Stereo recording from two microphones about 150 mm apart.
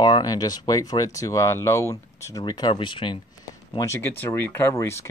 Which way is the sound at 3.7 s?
20° left (ahead or behind).